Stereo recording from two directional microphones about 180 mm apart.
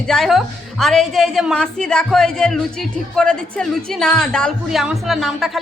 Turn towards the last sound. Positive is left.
turn(degrees=0)  # may be behind; listen again after turning